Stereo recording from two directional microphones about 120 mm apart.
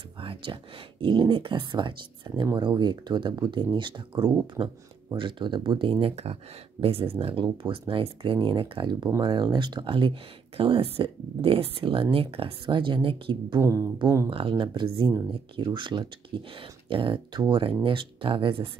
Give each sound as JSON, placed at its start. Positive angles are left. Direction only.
{"t": 0.2, "sound": "speech", "side_deg": -45}
{"t": 7.4, "sound": "speech", "side_deg": -40}
{"t": 13.6, "sound": "speech", "side_deg": -25}
{"t": 14.3, "sound": "speech", "side_deg": -45}